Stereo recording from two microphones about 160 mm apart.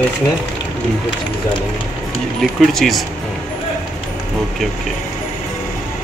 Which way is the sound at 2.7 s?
Centre (ahead or behind).